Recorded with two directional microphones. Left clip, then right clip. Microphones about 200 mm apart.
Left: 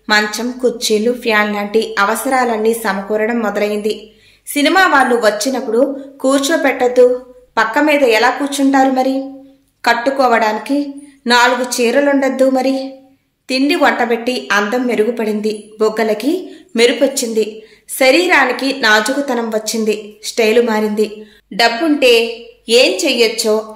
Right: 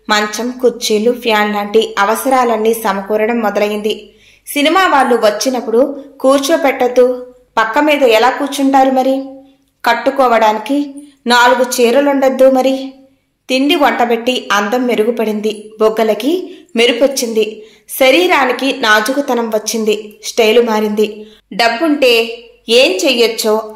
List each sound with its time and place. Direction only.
0.0 s a woman's voice: centre (ahead or behind)